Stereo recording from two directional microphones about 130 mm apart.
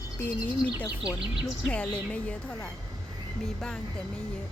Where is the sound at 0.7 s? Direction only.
5° right (ahead or behind).